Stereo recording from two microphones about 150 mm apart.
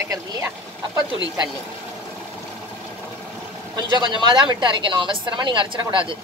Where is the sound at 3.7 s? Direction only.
30° right (ahead or behind).